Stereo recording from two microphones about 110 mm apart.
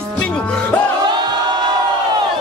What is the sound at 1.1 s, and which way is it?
Crowd, 45° right (ahead or behind).